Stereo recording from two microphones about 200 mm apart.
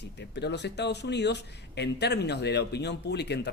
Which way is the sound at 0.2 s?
60° left (ahead or behind).